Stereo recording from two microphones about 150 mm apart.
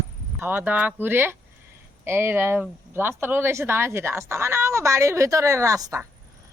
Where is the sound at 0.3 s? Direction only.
15° right (ahead or behind).